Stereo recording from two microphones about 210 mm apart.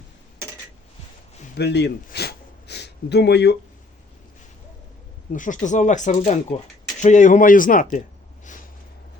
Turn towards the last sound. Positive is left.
turn(degrees=40)  # may be behind; listen again after turning